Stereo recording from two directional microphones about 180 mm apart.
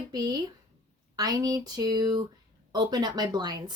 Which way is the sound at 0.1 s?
20° right (ahead or behind).